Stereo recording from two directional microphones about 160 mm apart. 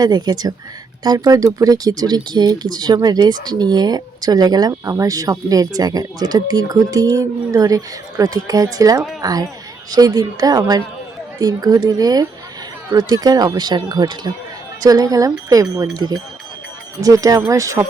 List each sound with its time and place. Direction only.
0.0 s speech: 25° right (ahead or behind)